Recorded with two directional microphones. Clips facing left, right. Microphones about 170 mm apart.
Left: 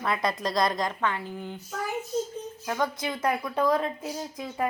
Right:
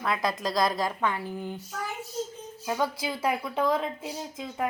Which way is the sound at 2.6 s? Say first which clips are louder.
Right 1 dB; 5° right (ahead or behind).